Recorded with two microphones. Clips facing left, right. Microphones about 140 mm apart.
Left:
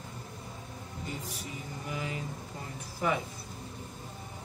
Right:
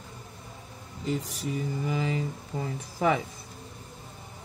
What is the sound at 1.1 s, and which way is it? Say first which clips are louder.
Speech: right 11 dB; 90° right.